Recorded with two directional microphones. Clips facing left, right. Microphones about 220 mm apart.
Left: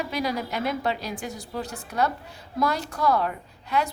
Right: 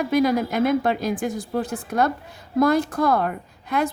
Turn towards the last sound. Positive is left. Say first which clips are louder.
# right 3 dB
turn(degrees=-50)  # may be behind; listen again after turning